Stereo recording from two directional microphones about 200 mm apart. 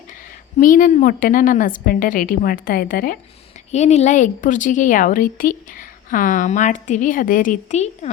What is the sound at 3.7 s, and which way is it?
A woman's voice, 35° left (ahead or behind).